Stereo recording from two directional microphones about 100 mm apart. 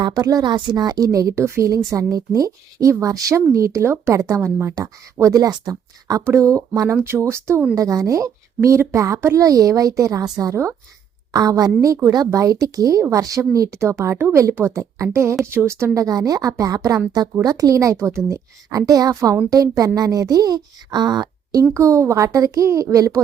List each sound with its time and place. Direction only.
0.0 s a woman's voice: 40° right (ahead or behind)
0.5 s a woman's voice: 50° right (ahead or behind)
21.6 s a woman's voice: 30° right (ahead or behind)